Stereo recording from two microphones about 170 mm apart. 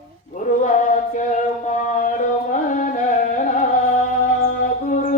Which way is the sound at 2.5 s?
45° left (ahead or behind).